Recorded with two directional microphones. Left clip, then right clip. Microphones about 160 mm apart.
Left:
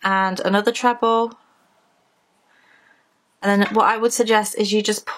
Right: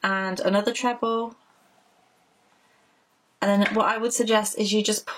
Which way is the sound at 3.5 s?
35° left (ahead or behind).